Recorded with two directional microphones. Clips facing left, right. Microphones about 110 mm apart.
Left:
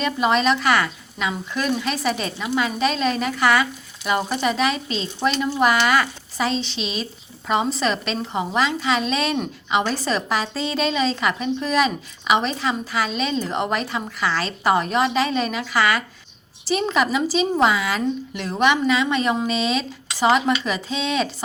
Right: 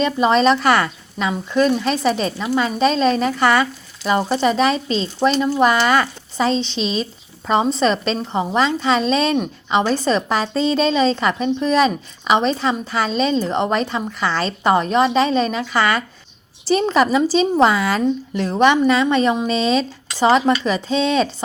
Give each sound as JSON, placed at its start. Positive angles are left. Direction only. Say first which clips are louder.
{"t": 0.0, "sound": "a woman's voice", "louder": "right 4 dB", "side_deg": -30}